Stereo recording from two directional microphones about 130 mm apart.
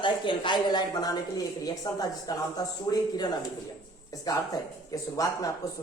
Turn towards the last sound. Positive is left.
turn(degrees=25)  # may be behind; listen again after turning